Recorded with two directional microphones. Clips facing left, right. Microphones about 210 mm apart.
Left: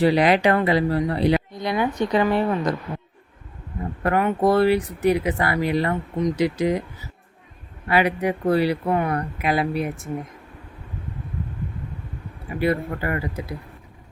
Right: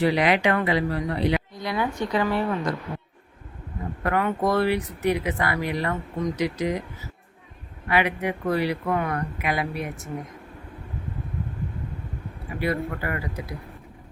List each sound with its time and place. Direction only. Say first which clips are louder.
0.0 s speech: left 4 dB; 35° left (ahead or behind)
1.5 s speech: left 4 dB; 20° left (ahead or behind)
4.0 s speech: left 4 dB; 30° left (ahead or behind)
7.9 s speech: left 3 dB; 35° left (ahead or behind)
12.5 s speech: left 4 dB; 30° left (ahead or behind)